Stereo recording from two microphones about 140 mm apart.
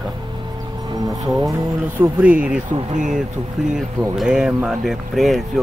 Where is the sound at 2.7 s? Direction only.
65° right (ahead or behind).